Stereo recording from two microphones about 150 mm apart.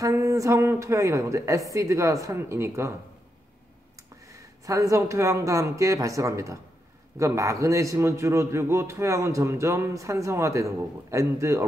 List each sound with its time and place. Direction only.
0.0 s a man's voice: 20° right (ahead or behind)
4.3 s a man's voice: 20° right (ahead or behind)